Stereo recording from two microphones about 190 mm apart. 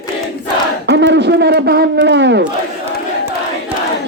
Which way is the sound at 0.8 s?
65° right (ahead or behind).